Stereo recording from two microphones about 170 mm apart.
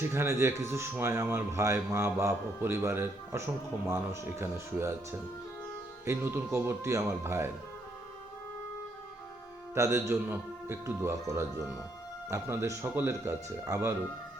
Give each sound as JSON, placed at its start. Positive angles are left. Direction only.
{"t": 0.1, "sound": "speech", "side_deg": -15}
{"t": 6.1, "sound": "speech", "side_deg": -15}
{"t": 9.7, "sound": "speech", "side_deg": -20}